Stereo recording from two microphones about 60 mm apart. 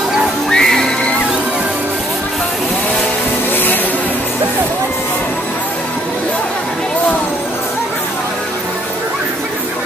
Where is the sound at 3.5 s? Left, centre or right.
Left.